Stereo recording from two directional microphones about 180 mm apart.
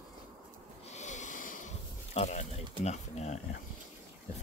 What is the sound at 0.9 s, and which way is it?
Snort, 40° left (ahead or behind).